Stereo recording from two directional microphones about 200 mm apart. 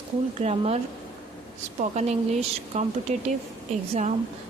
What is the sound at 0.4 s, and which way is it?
Speech, 30° right (ahead or behind).